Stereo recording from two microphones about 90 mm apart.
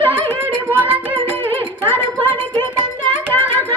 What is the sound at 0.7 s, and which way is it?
Music, 20° right (ahead or behind).